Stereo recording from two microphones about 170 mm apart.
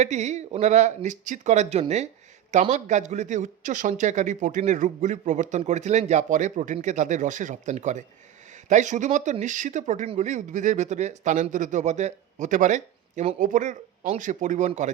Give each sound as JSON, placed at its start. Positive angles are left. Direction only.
{"t": 0.0, "sound": "speech", "side_deg": -45}